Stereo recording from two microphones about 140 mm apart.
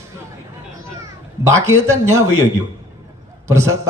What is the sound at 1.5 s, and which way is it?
Speech, 20° right (ahead or behind).